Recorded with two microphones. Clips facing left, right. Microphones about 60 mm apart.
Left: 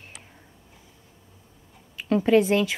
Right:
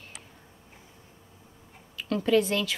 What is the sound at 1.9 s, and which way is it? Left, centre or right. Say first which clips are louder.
Speech: left 4 dB; left.